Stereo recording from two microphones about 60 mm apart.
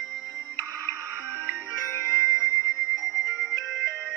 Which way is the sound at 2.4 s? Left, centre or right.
Right.